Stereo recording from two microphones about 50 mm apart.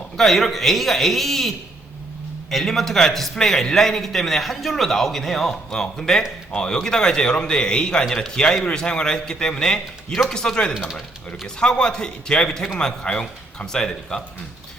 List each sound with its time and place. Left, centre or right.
0.2 s a man's voice: centre
10.1 s a man's voice: centre
10.3 s a man's voice: centre